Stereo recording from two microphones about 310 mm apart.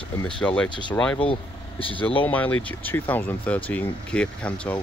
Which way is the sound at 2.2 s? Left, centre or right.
Centre.